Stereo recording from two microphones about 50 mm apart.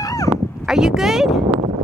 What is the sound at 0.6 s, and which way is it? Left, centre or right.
Speech, centre.